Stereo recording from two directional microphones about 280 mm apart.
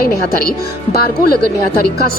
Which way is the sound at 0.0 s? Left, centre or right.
Left.